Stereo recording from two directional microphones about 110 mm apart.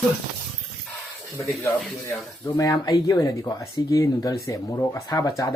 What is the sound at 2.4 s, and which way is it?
Speech, 30° left (ahead or behind).